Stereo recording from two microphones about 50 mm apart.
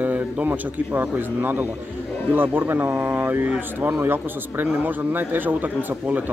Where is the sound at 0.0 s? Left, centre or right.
Right.